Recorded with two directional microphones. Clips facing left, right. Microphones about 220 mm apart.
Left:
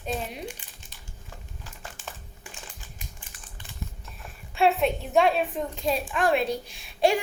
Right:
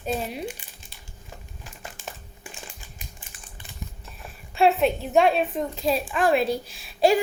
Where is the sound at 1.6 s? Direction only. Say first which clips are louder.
Right 3 dB; 10° right (ahead or behind).